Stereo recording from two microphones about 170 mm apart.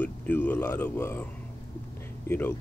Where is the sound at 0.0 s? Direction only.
10° left (ahead or behind).